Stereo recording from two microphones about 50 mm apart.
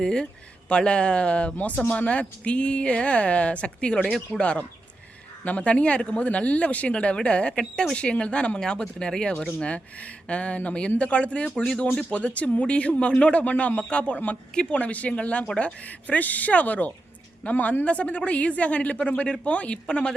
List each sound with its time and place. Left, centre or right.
0.0 s speech: centre